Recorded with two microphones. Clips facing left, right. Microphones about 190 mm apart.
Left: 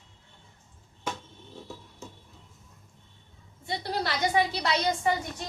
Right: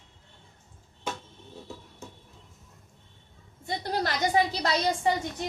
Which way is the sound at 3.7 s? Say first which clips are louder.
Right 1 dB; 40° right (ahead or behind).